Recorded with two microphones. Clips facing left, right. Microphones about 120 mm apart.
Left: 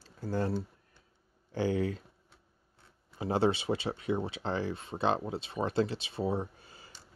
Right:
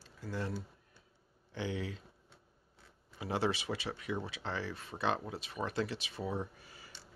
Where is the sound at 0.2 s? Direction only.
40° left (ahead or behind).